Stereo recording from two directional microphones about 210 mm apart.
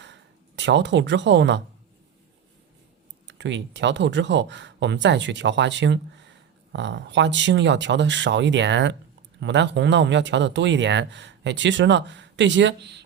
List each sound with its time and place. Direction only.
0.0 s speech: 60° right (ahead or behind)
3.2 s speech: 60° right (ahead or behind)